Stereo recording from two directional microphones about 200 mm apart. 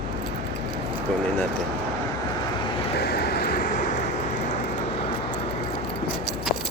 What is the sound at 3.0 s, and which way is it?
Vehicle, 50° left (ahead or behind).